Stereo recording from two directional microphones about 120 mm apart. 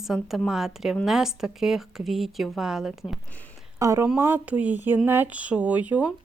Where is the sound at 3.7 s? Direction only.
25° right (ahead or behind).